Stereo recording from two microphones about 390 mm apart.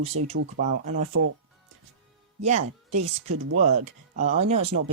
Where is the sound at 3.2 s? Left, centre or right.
Right.